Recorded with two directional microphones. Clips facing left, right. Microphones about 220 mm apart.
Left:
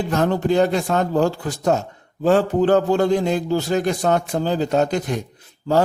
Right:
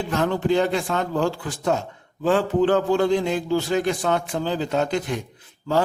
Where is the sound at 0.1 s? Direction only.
40° left (ahead or behind).